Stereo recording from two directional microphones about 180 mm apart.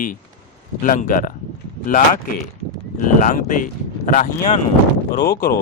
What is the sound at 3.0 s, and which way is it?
Speech, 45° left (ahead or behind).